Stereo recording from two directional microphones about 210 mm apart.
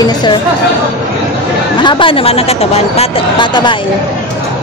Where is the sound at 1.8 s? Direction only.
25° left (ahead or behind).